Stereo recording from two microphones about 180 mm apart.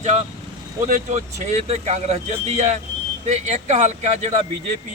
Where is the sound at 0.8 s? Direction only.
45° right (ahead or behind).